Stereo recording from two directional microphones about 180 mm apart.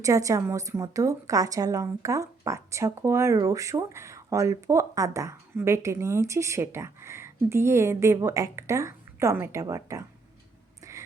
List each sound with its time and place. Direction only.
0.0 s a woman's voice: 15° right (ahead or behind)